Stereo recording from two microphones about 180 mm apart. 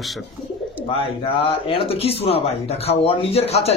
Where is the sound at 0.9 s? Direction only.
30° left (ahead or behind).